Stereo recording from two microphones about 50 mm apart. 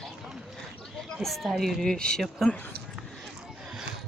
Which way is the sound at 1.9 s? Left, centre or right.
Centre.